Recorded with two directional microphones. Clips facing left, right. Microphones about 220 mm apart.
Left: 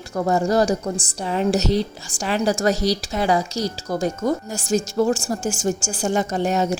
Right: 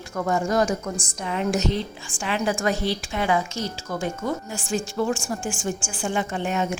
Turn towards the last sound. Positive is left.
turn(degrees=40)  # may be behind; listen again after turning